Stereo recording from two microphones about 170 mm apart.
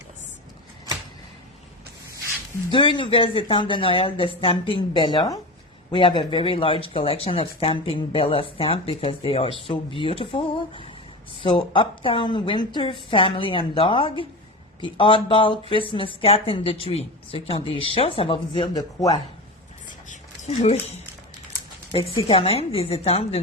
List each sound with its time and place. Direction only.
2.6 s a woman's voice: 30° left (ahead or behind)
20.1 s a sound: 40° left (ahead or behind)
21.9 s speech: 35° left (ahead or behind)